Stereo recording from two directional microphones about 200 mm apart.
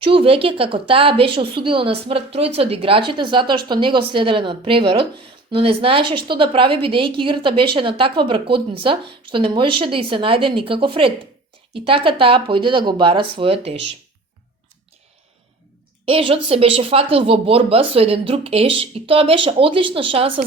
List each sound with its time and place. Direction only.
0.0 s speech: 25° right (ahead or behind)
16.0 s speech: 25° right (ahead or behind)